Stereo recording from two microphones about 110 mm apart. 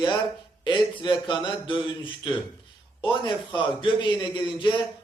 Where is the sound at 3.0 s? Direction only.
50° left (ahead or behind).